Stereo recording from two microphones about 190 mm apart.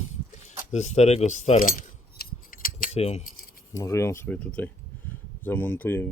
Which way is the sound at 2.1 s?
50° left (ahead or behind).